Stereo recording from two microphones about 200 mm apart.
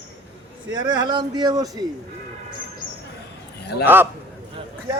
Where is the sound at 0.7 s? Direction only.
20° right (ahead or behind).